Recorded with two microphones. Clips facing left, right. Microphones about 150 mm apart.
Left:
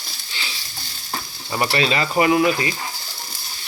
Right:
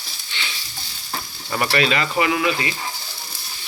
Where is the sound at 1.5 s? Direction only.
20° left (ahead or behind); by 2.7 s 40° left (ahead or behind).